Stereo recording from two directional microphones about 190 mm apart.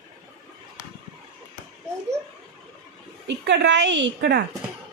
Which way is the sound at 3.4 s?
70° right (ahead or behind).